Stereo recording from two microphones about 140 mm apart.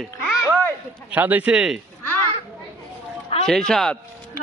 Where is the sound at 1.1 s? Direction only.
10° right (ahead or behind).